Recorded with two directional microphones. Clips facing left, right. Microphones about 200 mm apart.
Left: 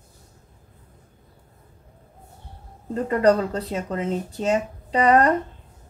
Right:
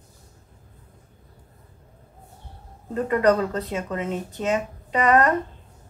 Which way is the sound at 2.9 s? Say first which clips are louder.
Left 1 dB; 30° left (ahead or behind).